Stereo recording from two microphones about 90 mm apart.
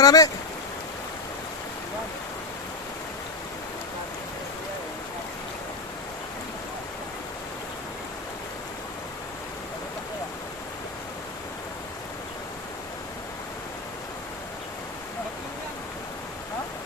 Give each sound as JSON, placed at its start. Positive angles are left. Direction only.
{"t": 0.0, "sound": "speech", "side_deg": 40}